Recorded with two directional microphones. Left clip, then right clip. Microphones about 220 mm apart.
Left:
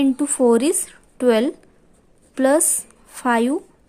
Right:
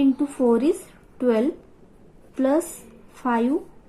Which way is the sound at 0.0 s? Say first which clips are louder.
Left 3 dB; 55° left (ahead or behind).